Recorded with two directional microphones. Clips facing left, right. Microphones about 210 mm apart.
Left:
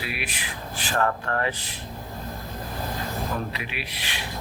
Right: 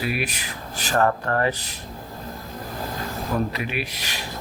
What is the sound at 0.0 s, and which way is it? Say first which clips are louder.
Speech: right 6 dB; 45° right (ahead or behind).